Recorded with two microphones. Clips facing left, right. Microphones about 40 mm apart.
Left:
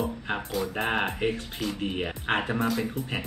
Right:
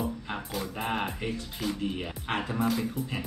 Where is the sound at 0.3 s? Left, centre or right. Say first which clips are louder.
Left 5 dB; left.